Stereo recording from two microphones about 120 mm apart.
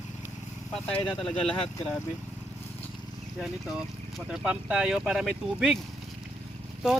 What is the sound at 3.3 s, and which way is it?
Speech, 5° right (ahead or behind).